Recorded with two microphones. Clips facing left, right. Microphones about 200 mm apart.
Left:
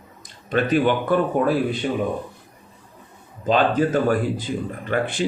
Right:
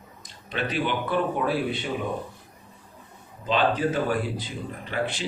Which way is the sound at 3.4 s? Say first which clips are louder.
Left 5 dB; 45° left (ahead or behind).